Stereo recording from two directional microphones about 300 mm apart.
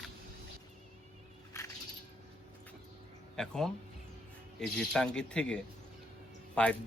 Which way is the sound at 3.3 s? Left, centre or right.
Centre.